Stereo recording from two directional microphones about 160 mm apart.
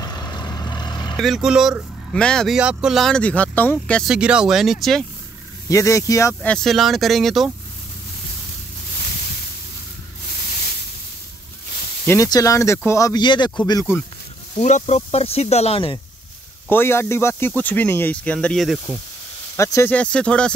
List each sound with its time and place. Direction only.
0.0 s vehicle: 25° left (ahead or behind)
1.1 s speech: centre (ahead or behind)
4.1 s speech: 5° right (ahead or behind)
5.7 s speech: 20° left (ahead or behind)
6.4 s speech: 5° left (ahead or behind)
12.1 s speech: 20° left (ahead or behind)
14.6 s speech: 45° left (ahead or behind)
16.6 s speech: 15° left (ahead or behind)
19.5 s speech: 20° left (ahead or behind)